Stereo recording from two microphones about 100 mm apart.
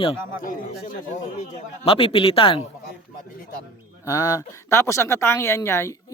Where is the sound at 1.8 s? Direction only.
70° left (ahead or behind).